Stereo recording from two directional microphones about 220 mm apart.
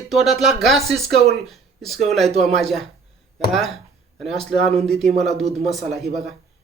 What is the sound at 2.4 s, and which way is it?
Speech, centre (ahead or behind).